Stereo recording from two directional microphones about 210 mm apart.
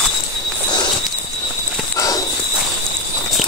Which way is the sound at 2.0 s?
15° left (ahead or behind).